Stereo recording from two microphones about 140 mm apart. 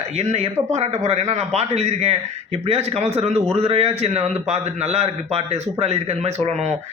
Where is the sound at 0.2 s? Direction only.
50° right (ahead or behind).